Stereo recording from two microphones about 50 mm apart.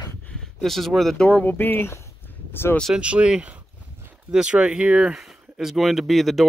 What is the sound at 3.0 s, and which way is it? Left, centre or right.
Speech, right.